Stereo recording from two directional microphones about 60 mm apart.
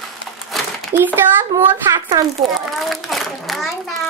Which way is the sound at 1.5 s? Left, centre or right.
Right.